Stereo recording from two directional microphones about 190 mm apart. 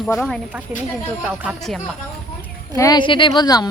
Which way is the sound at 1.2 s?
10° right (ahead or behind).